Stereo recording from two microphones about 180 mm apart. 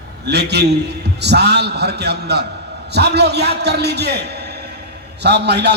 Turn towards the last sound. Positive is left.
turn(degrees=-70)  # may be behind; listen again after turning